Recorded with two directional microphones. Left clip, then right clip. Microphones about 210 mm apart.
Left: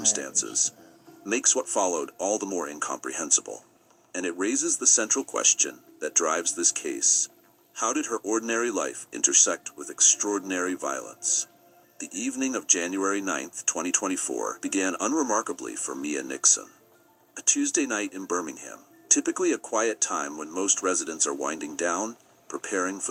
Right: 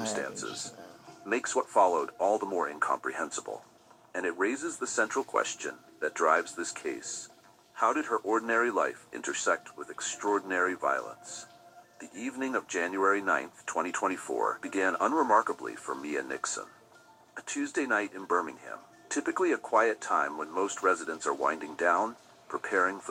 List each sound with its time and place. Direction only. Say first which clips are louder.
0.2 s speech: left 7 dB; 30° left (ahead or behind)